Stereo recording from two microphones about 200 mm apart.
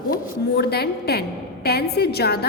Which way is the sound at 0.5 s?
55° left (ahead or behind).